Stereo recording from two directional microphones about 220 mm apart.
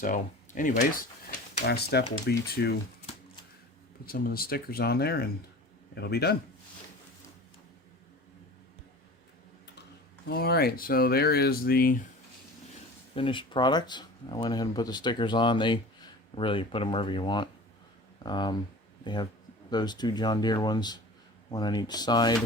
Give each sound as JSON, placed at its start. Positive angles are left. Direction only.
{"t": 0.0, "sound": "speech", "side_deg": 35}
{"t": 1.6, "sound": "speech", "side_deg": 50}
{"t": 4.0, "sound": "speech", "side_deg": 40}
{"t": 10.2, "sound": "speech", "side_deg": 45}
{"t": 13.1, "sound": "speech", "side_deg": 25}